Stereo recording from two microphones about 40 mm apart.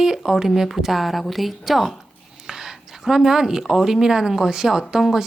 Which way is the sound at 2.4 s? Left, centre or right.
Centre.